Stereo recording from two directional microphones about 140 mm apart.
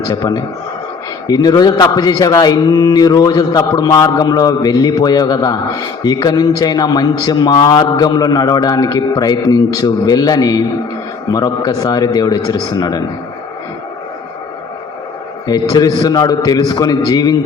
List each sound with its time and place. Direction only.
0.0 s a man's voice: 30° left (ahead or behind)
15.4 s a man's voice: 30° left (ahead or behind)